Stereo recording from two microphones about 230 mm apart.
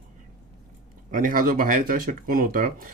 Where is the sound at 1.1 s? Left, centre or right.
Right.